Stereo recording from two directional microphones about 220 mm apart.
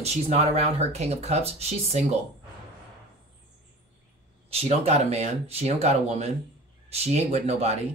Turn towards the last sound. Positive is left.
turn(degrees=-30)  # may be behind; listen again after turning